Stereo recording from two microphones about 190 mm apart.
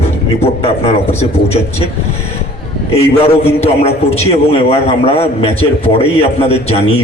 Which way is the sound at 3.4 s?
35° left (ahead or behind).